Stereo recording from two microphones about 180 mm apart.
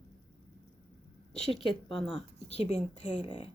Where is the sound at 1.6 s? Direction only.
30° left (ahead or behind).